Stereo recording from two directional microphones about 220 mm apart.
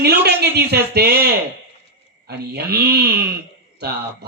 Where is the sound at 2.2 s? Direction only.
45° right (ahead or behind).